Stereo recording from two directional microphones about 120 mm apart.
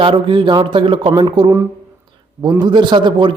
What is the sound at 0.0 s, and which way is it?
A man's voice, 45° right (ahead or behind).